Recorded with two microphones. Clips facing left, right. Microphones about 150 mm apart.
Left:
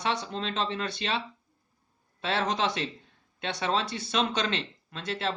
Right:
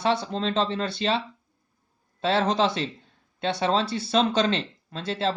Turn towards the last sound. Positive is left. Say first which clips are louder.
# right 5 dB
turn(degrees=-30)  # may be behind; listen again after turning